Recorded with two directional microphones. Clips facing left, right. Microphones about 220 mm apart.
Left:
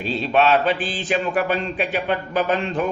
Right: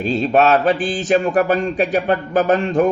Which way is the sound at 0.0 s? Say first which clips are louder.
Right 4 dB; 45° right (ahead or behind).